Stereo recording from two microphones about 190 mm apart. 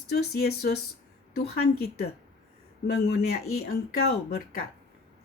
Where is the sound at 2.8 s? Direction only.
55° left (ahead or behind).